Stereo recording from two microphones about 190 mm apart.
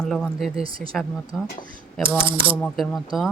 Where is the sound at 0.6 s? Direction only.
30° right (ahead or behind).